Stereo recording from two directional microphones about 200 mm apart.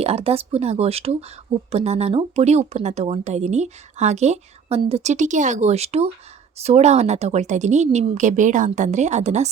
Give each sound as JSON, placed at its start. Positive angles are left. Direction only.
{"t": 0.0, "sound": "speech", "side_deg": -30}